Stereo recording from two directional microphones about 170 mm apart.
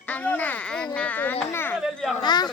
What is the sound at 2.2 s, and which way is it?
Speech, 25° left (ahead or behind).